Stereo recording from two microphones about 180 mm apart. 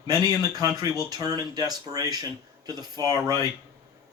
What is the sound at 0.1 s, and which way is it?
Speech, 20° right (ahead or behind).